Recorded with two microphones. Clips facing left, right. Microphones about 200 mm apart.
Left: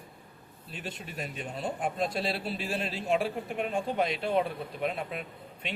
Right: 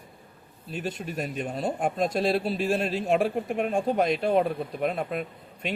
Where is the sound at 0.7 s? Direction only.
45° right (ahead or behind).